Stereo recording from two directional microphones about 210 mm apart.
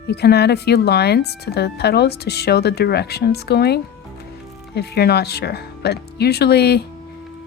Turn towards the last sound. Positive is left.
turn(degrees=50)  # may be behind; listen again after turning